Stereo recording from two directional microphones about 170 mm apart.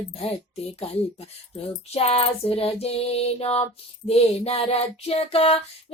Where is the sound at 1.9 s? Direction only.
35° left (ahead or behind).